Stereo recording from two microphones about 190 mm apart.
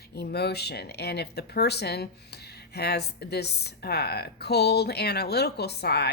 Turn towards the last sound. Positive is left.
turn(degrees=60)  # may be behind; listen again after turning